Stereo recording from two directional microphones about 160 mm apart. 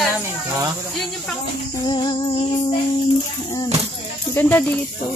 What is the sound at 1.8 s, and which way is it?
Music, 30° left (ahead or behind).